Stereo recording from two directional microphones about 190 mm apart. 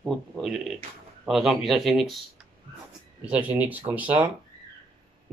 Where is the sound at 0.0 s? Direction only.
Centre (ahead or behind).